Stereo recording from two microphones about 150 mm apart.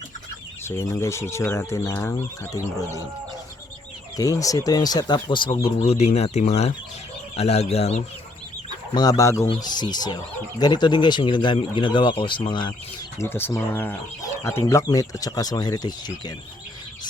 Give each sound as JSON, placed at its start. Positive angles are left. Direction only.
{"t": 0.6, "sound": "speech", "side_deg": 15}
{"t": 4.2, "sound": "speech", "side_deg": 25}
{"t": 9.0, "sound": "speech", "side_deg": 25}
{"t": 13.1, "sound": "speech", "side_deg": 15}